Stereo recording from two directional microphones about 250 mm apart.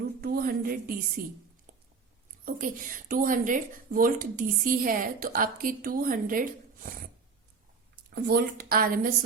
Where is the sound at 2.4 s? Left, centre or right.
Right.